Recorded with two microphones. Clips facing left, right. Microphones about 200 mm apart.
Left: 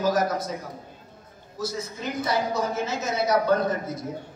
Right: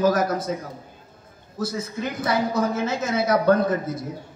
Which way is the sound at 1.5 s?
55° right (ahead or behind).